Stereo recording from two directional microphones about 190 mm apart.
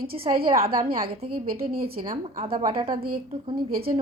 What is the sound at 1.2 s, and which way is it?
Speech, 50° right (ahead or behind).